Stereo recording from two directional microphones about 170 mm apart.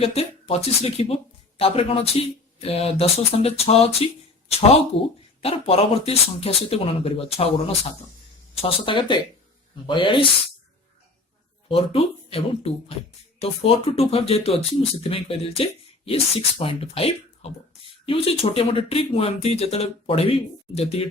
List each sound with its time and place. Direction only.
0.0 s speech: 35° left (ahead or behind)
5.4 s speech: 35° left (ahead or behind)
11.7 s speech: 35° left (ahead or behind)